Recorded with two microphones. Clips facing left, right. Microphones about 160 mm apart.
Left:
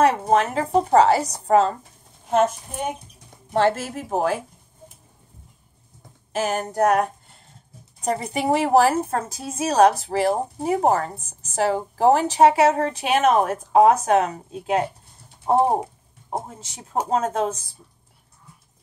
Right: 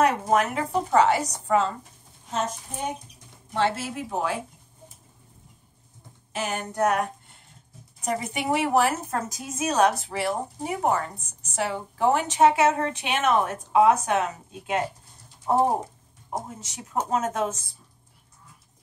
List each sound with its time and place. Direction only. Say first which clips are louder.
0.3 s a woman's voice: left 4 dB; 30° left (ahead or behind)
2.3 s child singing: left 9 dB; 55° left (ahead or behind)
3.5 s speech: left 5 dB; 45° left (ahead or behind)
6.3 s a woman's voice: left 6 dB; 40° left (ahead or behind)